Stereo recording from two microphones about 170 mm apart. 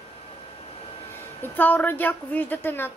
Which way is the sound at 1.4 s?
10° left (ahead or behind).